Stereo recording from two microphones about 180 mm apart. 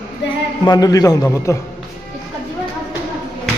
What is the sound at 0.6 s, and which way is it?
Speech, 20° left (ahead or behind).